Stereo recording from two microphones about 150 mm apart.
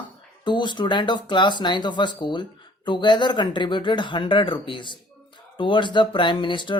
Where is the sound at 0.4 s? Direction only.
30° left (ahead or behind).